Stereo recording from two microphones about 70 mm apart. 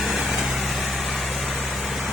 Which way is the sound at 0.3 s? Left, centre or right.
Centre.